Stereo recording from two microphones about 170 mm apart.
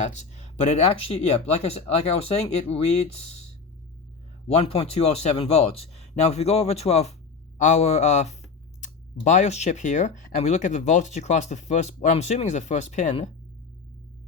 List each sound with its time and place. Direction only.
0.0 s speech: 45° left (ahead or behind)
4.4 s speech: 35° left (ahead or behind)